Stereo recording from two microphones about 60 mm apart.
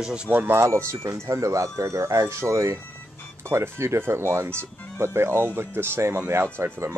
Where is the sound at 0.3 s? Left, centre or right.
Right.